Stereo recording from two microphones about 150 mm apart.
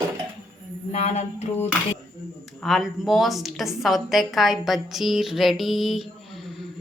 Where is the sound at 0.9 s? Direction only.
45° left (ahead or behind).